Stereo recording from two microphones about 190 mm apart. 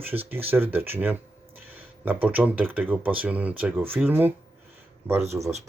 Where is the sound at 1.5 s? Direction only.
10° right (ahead or behind).